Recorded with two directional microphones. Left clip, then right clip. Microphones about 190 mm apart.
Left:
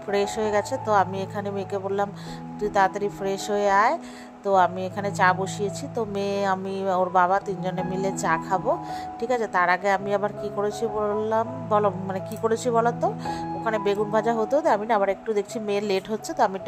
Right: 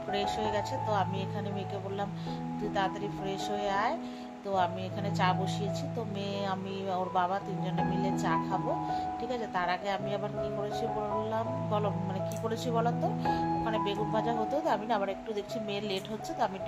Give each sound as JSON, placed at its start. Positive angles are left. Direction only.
{"t": 0.1, "sound": "speech", "side_deg": 40}
{"t": 2.7, "sound": "a woman's voice", "side_deg": 45}